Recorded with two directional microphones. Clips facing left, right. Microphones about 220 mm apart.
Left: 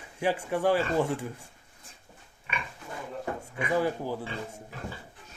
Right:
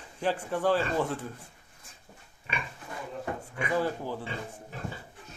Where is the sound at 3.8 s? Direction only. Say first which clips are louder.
Left 2 dB; 10° left (ahead or behind).